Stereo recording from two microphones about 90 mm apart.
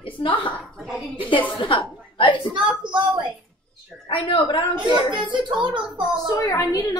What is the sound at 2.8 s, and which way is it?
Speech, 60° right (ahead or behind).